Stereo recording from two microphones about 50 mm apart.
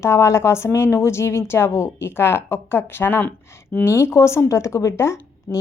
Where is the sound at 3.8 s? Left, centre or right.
Left.